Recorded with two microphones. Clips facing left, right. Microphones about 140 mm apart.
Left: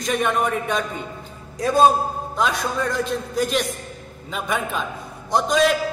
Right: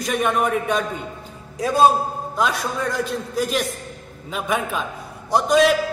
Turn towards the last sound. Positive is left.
turn(degrees=-5)  # may be behind; listen again after turning